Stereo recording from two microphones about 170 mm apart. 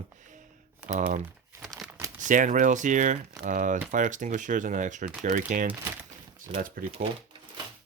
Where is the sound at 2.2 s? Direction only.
50° right (ahead or behind).